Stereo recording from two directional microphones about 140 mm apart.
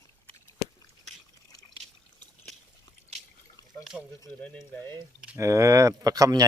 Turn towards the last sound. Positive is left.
turn(degrees=-25)  # may be behind; listen again after turning